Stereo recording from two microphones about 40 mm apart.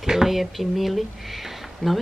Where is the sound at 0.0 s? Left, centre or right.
Centre.